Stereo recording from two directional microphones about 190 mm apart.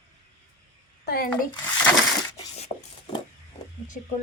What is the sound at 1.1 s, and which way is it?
Speech, 50° left (ahead or behind).